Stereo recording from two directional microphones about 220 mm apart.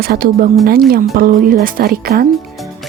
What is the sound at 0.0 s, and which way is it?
A woman's voice, 45° right (ahead or behind).